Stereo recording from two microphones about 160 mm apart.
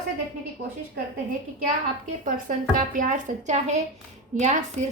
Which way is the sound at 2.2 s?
60° right (ahead or behind).